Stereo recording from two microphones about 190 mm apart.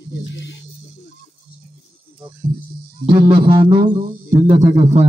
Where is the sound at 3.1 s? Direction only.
30° right (ahead or behind).